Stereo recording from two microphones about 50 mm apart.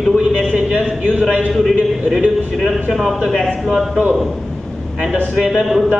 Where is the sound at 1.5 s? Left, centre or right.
Centre.